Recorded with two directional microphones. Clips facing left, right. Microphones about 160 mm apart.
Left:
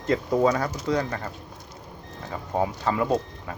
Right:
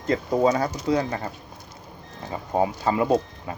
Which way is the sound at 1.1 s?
15° right (ahead or behind).